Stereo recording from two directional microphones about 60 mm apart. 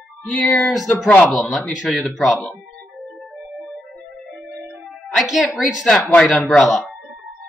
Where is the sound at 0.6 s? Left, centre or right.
Centre.